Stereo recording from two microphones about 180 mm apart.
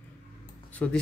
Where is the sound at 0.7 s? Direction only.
5° left (ahead or behind).